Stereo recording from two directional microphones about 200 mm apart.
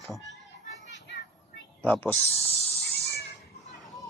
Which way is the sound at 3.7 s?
Centre (ahead or behind).